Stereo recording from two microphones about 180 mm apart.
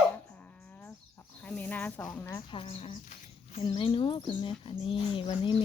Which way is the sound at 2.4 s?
30° left (ahead or behind).